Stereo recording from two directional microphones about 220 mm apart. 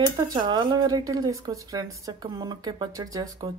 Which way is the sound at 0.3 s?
20° right (ahead or behind).